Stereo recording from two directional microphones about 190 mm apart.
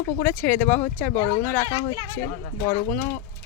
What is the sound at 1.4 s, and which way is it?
Speech, 10° left (ahead or behind).